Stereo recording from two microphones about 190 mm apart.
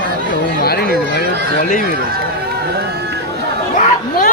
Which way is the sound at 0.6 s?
55° left (ahead or behind).